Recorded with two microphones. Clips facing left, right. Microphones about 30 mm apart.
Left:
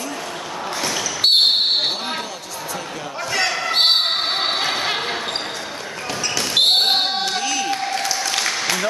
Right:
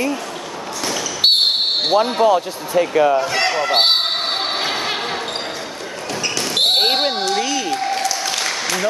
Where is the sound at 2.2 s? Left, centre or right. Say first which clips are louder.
Right 15 dB; right.